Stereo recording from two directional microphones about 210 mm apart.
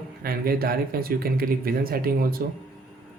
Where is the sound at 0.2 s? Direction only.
45° right (ahead or behind).